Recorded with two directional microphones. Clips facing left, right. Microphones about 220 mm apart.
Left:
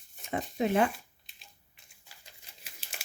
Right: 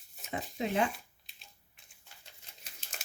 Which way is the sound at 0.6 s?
55° left (ahead or behind).